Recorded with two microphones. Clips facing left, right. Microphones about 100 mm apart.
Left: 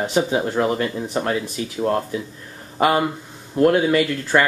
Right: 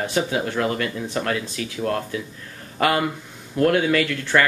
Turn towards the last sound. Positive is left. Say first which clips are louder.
# left 2 dB
turn(degrees=20)  # may be behind; listen again after turning